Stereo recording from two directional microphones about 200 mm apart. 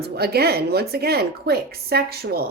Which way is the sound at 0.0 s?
50° right (ahead or behind).